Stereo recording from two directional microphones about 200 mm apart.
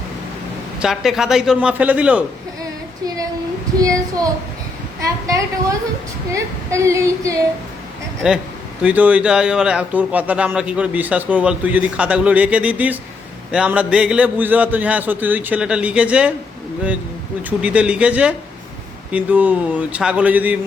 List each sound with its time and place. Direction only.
0.8 s a man's voice: centre (ahead or behind)
3.8 s a man's voice: 15° right (ahead or behind)
8.2 s a man's voice: 5° right (ahead or behind)
17.6 s a man's voice: 5° right (ahead or behind)